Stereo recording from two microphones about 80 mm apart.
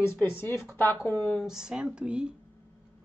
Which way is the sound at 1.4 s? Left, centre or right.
Centre.